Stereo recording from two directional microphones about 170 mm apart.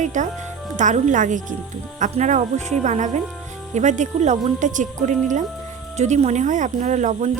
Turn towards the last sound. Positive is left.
turn(degrees=-45)  # may be behind; listen again after turning